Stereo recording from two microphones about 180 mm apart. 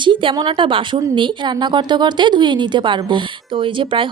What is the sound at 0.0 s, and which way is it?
Speech, 30° right (ahead or behind).